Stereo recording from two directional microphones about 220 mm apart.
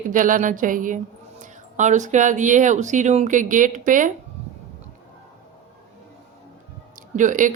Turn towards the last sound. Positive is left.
turn(degrees=-35)  # may be behind; listen again after turning